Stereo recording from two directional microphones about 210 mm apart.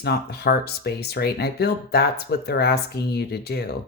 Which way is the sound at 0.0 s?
50° left (ahead or behind).